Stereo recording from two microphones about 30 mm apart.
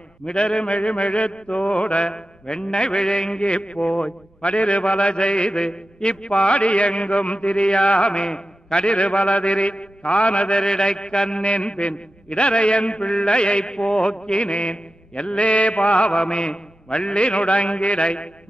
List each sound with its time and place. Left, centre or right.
0.3 s mantra: left
0.7 s mantra: left
2.0 s mantra: left
4.5 s mantra: left
8.9 s mantra: left
14.4 s mantra: left